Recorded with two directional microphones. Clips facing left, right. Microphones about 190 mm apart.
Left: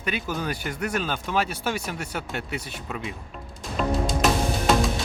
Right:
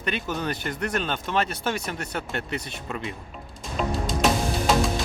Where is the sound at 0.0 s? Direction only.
5° left (ahead or behind).